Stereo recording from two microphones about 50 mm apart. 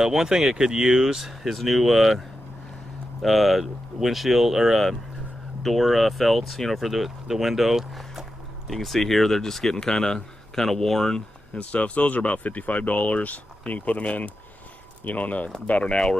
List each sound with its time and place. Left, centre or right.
0.0 s speech: centre
11.5 s speech: left